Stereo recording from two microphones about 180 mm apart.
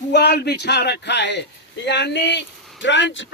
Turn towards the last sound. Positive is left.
turn(degrees=90)